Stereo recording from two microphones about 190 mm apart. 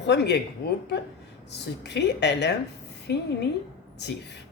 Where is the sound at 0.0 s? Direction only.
65° left (ahead or behind).